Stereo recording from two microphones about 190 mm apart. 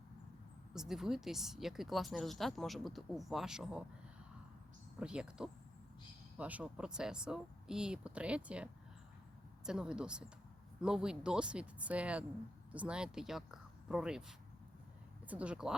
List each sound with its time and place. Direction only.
0.7 s speech: centre (ahead or behind)
4.9 s speech: 5° right (ahead or behind)